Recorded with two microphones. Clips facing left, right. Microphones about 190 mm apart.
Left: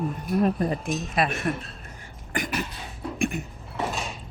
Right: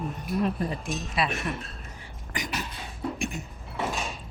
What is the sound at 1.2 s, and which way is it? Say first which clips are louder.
Speech: left 3 dB; 50° left (ahead or behind).